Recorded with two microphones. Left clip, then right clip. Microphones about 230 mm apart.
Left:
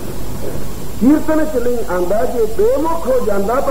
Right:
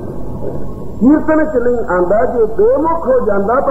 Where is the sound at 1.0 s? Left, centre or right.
Right.